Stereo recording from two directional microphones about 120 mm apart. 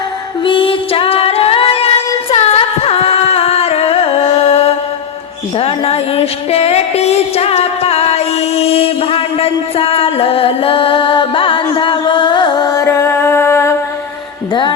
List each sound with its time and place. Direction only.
0.4 s singing: 45° left (ahead or behind)
5.5 s music: 55° left (ahead or behind); by 13.7 s 20° left (ahead or behind)